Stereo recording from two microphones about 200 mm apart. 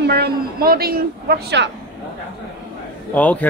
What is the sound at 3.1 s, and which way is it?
Speech, 5° left (ahead or behind).